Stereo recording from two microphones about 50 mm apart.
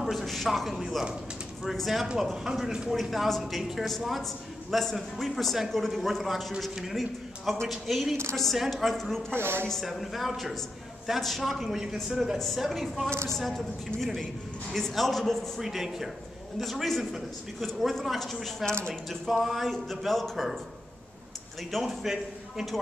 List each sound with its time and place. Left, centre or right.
0.0 s a man's voice: centre
9.3 s speech: right
9.7 s a man's voice: centre
11.6 s a man's voice: centre
13.1 s a woman's voice: right
13.4 s a man's voice: centre
15.6 s a man's voice: centre
21.6 s a man's voice: centre